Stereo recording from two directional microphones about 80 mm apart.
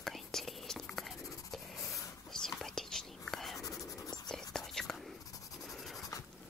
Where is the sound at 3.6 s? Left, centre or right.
Left.